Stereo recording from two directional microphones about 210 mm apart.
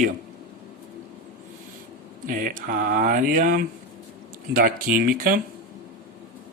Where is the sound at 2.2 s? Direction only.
40° right (ahead or behind).